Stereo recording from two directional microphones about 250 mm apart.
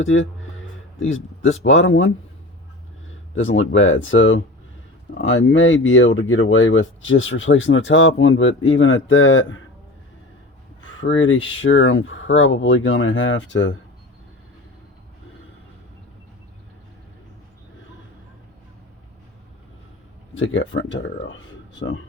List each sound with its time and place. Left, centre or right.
0.0 s speech: left
3.3 s speech: left
11.0 s speech: left
20.3 s speech: left